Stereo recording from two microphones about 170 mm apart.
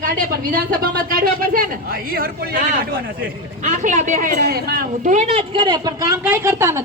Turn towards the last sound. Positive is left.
turn(degrees=-15)  # may be behind; listen again after turning